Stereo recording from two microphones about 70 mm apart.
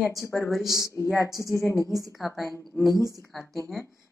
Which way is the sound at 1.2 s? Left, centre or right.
Left.